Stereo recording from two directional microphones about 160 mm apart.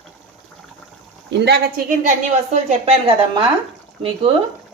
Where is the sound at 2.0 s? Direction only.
45° right (ahead or behind).